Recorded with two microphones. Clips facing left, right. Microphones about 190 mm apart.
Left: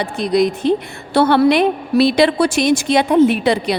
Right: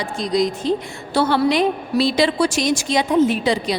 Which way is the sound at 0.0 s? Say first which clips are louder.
Left 4 dB; 60° left (ahead or behind).